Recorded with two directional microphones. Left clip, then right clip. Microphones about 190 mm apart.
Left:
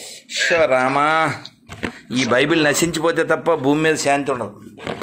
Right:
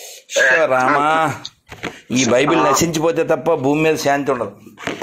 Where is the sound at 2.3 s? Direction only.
15° right (ahead or behind).